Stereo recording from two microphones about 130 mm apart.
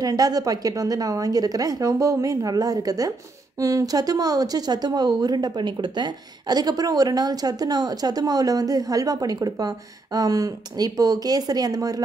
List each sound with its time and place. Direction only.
0.0 s speech: 30° right (ahead or behind)